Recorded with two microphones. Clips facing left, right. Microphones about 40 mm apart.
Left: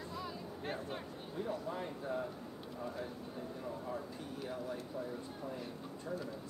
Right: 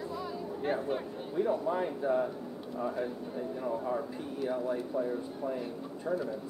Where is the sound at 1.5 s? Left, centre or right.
Right.